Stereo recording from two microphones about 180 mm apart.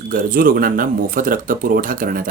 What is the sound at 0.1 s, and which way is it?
Speech, 50° right (ahead or behind).